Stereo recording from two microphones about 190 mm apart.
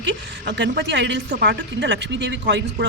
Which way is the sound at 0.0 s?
65° right (ahead or behind).